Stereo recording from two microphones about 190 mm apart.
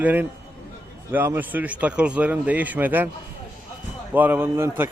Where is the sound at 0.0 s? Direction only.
10° right (ahead or behind).